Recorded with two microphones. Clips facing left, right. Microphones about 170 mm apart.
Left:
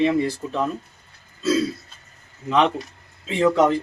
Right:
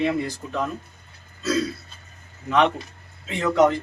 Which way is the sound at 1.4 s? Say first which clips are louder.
Left 3 dB; 30° left (ahead or behind).